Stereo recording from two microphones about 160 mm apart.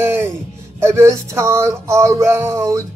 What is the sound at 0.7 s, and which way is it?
Speech, 15° right (ahead or behind).